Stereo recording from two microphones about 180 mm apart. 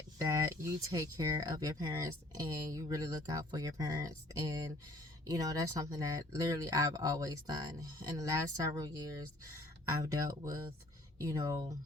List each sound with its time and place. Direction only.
0.2 s speech: 15° right (ahead or behind)